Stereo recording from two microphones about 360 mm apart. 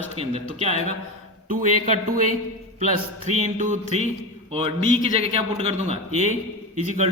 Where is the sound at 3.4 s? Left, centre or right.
Centre.